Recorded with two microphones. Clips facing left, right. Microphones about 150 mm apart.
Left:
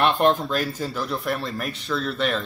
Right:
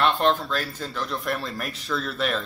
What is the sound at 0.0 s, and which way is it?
Speech, 15° left (ahead or behind).